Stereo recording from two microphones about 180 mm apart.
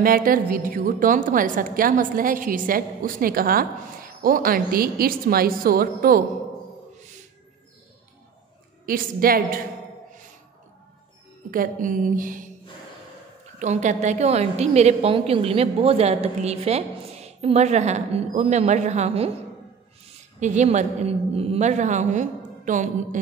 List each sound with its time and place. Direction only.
0.0 s a woman's voice: 50° right (ahead or behind)
8.8 s a woman's voice: 55° right (ahead or behind)
11.5 s a woman's voice: 50° right (ahead or behind)
13.6 s a woman's voice: 40° right (ahead or behind)
20.3 s a woman's voice: 40° right (ahead or behind)